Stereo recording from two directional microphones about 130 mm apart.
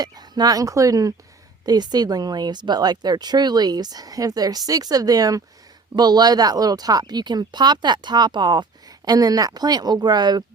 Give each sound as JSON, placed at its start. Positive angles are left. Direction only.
{"t": 0.0, "sound": "speech", "side_deg": -30}